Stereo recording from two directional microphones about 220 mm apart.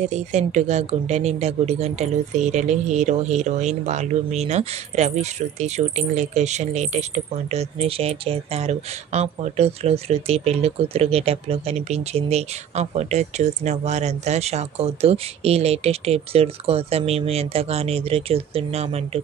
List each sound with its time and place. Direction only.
0.0 s speech: 30° right (ahead or behind)